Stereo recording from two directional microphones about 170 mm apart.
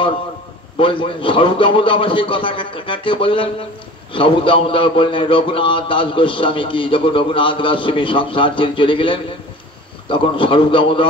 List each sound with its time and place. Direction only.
0.7 s a man's voice: 30° left (ahead or behind)